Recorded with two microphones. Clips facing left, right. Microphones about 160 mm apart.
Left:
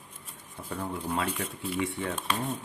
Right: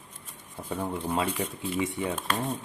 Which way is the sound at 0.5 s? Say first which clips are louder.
Right 3 dB; 20° right (ahead or behind).